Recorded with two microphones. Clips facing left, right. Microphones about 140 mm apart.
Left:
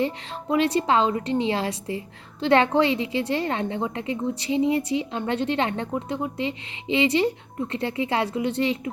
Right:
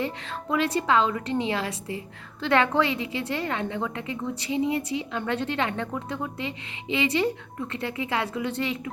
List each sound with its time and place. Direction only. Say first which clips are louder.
0.0 s a woman's voice: left 4 dB; 25° left (ahead or behind)